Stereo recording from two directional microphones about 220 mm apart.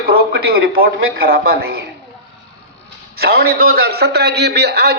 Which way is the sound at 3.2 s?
45° right (ahead or behind).